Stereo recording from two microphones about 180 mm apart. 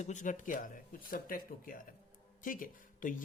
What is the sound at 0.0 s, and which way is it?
Speech, 45° left (ahead or behind).